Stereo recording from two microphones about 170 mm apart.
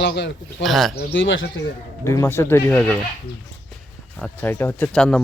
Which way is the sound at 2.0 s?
15° left (ahead or behind).